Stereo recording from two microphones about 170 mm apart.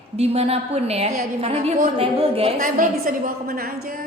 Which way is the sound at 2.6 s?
50° right (ahead or behind).